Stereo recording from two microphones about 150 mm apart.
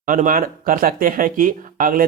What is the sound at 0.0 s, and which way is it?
Speech, 65° right (ahead or behind).